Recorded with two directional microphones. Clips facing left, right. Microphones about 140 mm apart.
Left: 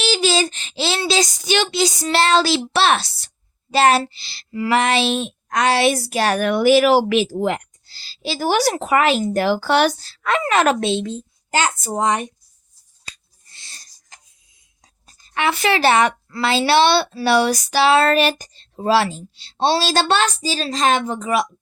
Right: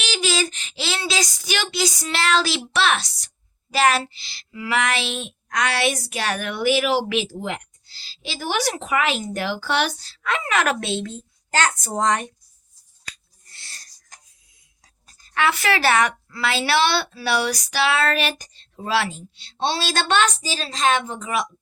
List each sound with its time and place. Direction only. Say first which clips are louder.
0.0 s a sound: left 5 dB; 30° left (ahead or behind)
3.7 s a woman's voice: left 4 dB; 30° left (ahead or behind)
11.7 s a woman's voice: left 2 dB; 5° left (ahead or behind)
13.1 s finger snapping: even; 20° left (ahead or behind)
15.0 s a woman's voice: left 1 dB; 25° left (ahead or behind); by 21.4 s 40° left (ahead or behind)